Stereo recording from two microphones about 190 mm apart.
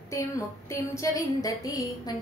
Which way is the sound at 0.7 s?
15° left (ahead or behind).